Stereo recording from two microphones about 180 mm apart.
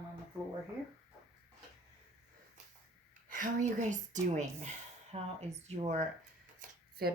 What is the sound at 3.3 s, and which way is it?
Speech, 45° right (ahead or behind).